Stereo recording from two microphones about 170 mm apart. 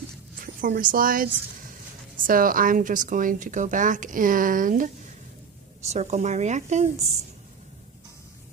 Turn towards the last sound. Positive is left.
turn(degrees=-45)  # may be behind; listen again after turning